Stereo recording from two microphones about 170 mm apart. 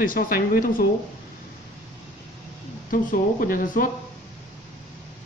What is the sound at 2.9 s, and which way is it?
Speech, 55° left (ahead or behind).